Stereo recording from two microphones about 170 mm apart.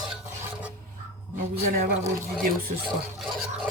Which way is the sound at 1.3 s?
55° right (ahead or behind).